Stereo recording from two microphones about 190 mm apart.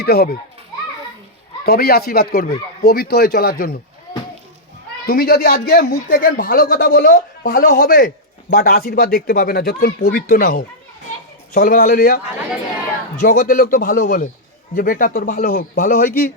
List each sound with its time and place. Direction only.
0.0 s a child's voice: 55° left (ahead or behind)
1.6 s speech: 55° left (ahead or behind)
5.0 s speech: 55° left (ahead or behind)
7.0 s speech: 45° left (ahead or behind)